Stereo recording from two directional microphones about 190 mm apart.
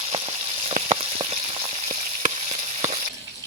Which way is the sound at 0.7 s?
30° right (ahead or behind).